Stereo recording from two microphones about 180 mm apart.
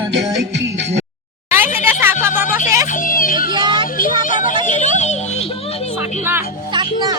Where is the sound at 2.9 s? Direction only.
50° left (ahead or behind).